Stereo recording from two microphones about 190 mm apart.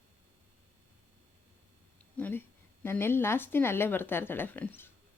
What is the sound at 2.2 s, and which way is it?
Speech, 10° left (ahead or behind).